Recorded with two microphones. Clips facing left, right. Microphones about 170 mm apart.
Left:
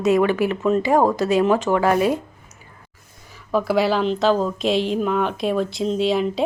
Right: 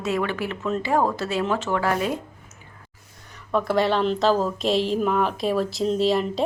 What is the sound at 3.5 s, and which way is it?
Speech, 5° left (ahead or behind).